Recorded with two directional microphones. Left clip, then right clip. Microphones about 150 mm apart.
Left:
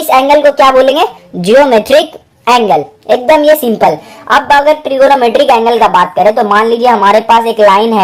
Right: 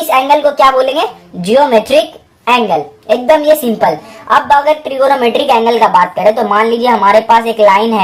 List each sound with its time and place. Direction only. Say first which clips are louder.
0.1 s a woman's voice: left 4 dB; 40° left (ahead or behind)